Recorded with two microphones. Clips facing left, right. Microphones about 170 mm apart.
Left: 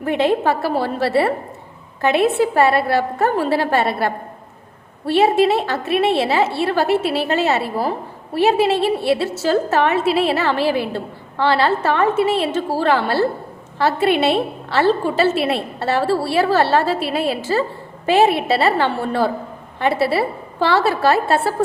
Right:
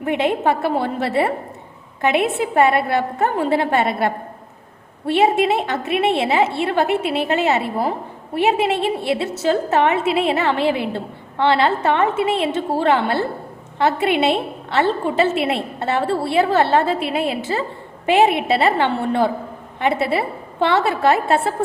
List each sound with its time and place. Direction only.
0.1 s a woman's voice: 15° right (ahead or behind)